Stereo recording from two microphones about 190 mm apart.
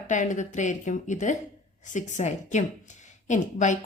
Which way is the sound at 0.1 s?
40° left (ahead or behind).